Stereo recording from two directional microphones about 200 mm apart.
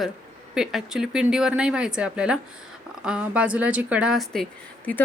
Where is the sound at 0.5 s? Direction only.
5° right (ahead or behind).